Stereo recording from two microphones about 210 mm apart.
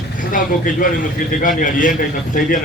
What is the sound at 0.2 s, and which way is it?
A man's voice, 40° left (ahead or behind).